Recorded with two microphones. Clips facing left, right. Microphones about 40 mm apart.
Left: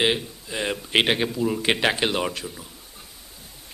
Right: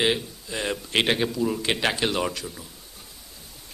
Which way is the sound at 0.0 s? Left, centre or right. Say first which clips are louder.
Left 1 dB; centre.